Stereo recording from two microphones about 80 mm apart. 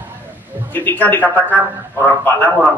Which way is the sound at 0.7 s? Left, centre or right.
Left.